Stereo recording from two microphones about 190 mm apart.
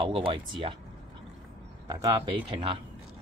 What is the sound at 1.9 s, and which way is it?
Speech, 20° right (ahead or behind).